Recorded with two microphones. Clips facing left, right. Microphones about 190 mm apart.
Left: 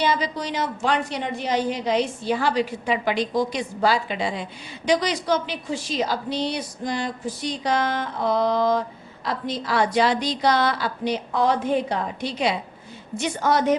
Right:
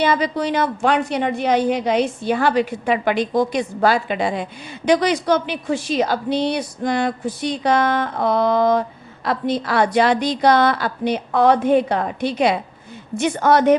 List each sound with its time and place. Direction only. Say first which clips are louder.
0.0 s a woman's voice: right 5 dB; 60° right (ahead or behind)